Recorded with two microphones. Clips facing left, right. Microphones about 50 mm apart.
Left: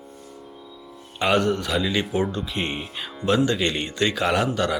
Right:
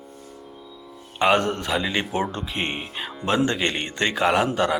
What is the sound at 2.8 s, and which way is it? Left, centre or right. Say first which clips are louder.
Speech: right 1 dB; centre.